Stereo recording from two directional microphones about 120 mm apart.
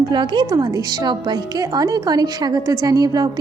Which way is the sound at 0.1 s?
40° right (ahead or behind).